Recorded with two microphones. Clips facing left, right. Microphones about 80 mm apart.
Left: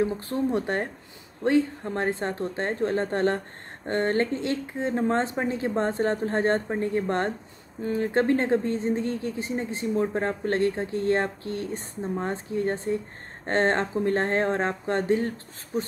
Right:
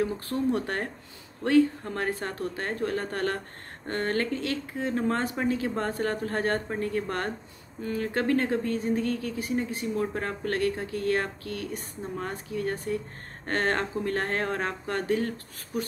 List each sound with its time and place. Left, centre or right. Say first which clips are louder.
0.0 s speech: left 2 dB; left